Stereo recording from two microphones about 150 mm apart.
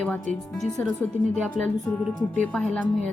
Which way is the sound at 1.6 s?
Centre (ahead or behind).